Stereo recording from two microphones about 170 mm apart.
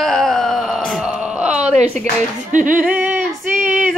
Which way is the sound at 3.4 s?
50° right (ahead or behind).